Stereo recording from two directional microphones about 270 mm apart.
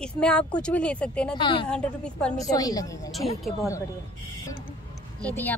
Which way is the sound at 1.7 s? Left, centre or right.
Centre.